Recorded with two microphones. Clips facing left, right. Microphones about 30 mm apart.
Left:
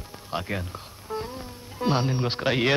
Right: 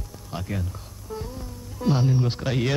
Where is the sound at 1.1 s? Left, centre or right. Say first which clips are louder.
Left 2 dB; left.